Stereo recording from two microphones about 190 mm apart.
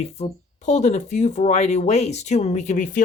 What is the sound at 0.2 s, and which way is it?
Speech, 40° left (ahead or behind).